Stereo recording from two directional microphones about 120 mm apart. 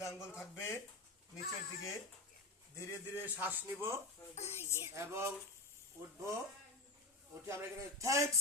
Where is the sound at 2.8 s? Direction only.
20° left (ahead or behind).